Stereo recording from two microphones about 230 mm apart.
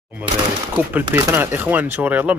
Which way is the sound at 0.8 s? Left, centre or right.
Centre.